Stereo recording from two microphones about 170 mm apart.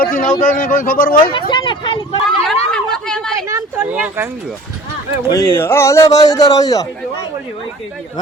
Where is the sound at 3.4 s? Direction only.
15° right (ahead or behind).